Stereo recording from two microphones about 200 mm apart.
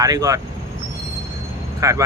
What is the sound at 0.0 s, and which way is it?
Speech, 15° right (ahead or behind).